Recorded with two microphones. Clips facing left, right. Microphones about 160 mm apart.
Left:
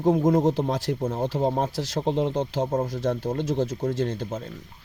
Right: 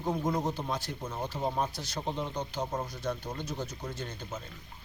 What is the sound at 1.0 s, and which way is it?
Speech, 50° left (ahead or behind).